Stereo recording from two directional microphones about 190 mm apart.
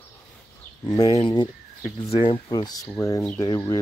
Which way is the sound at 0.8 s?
20° left (ahead or behind).